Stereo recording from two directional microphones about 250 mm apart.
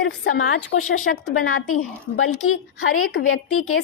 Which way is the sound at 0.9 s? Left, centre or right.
Left.